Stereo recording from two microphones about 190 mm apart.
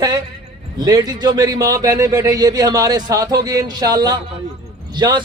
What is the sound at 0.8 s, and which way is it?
A man's voice, 20° right (ahead or behind).